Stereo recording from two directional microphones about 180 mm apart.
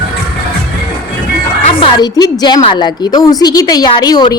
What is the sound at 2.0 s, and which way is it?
Speech, 20° left (ahead or behind).